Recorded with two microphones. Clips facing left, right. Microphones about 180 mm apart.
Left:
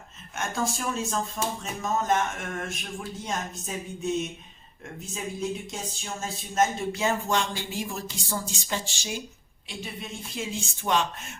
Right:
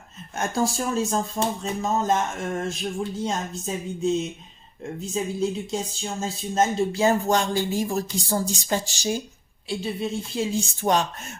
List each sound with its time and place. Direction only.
0.3 s speech: 35° right (ahead or behind)
5.1 s speech: 30° right (ahead or behind)